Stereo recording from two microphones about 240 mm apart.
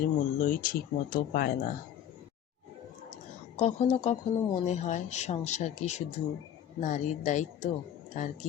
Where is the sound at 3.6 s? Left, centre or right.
Left.